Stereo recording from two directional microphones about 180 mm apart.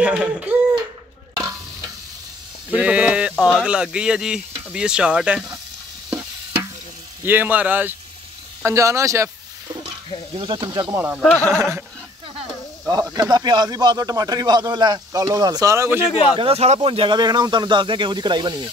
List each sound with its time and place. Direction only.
0.0 s speech: 5° right (ahead or behind)
2.7 s speech: 5° right (ahead or behind)
6.0 s stir: 10° right (ahead or behind)
7.2 s speech: 10° right (ahead or behind)
10.3 s speech: 25° right (ahead or behind)
11.1 s speech: 5° left (ahead or behind)
13.1 s speech: 20° right (ahead or behind)
16.1 s a man's voice: 35° left (ahead or behind)
16.3 s speech: 35° right (ahead or behind)